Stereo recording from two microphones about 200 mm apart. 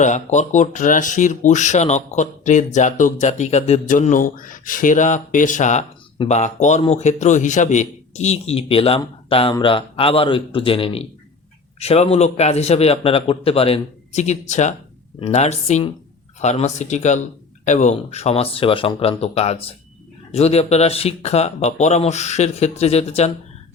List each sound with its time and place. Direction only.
0.0 s a man's voice: 35° left (ahead or behind)